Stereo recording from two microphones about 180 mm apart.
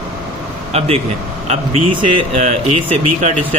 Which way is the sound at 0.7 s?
35° right (ahead or behind).